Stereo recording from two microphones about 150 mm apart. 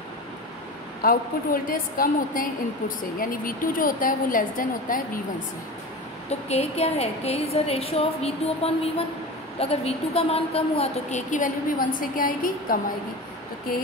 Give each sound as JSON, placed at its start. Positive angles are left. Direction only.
{"t": 1.0, "sound": "a woman's voice", "side_deg": 70}
{"t": 6.5, "sound": "a woman's voice", "side_deg": 45}